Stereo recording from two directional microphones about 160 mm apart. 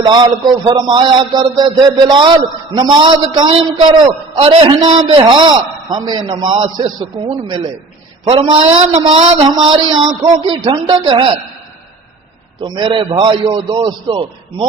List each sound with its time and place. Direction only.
0.4 s a man's voice: 25° right (ahead or behind)
12.6 s a man's voice: 30° right (ahead or behind)